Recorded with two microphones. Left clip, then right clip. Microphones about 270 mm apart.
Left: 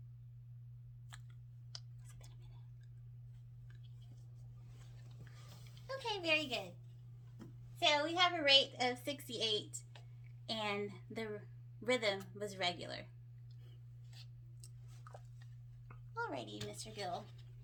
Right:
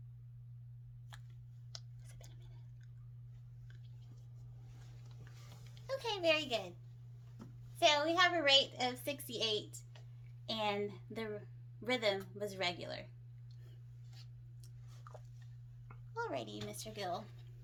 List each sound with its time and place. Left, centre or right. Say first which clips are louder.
1.1 s chewing: even; centre
1.7 s clicking: even; centre
5.9 s a child's voice: right 2 dB; right
7.8 s a woman's voice: right 2 dB; right
16.1 s a woman's voice: right 2 dB; right